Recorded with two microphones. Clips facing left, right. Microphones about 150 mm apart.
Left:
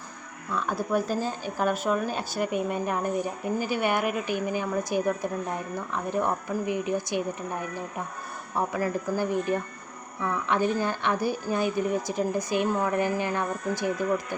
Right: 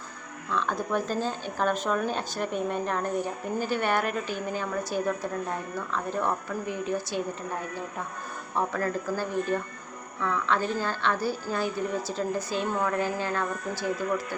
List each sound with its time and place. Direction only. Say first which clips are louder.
0.5 s speech: left 1 dB; 10° left (ahead or behind)
8.5 s speech: left 1 dB; 10° left (ahead or behind)